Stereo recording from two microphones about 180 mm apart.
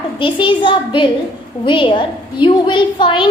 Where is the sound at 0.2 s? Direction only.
25° left (ahead or behind).